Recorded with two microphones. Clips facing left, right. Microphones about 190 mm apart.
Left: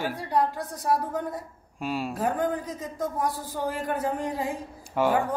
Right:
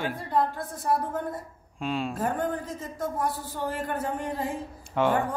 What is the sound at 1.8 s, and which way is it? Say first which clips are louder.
Speech: left 1 dB; 5° left (ahead or behind).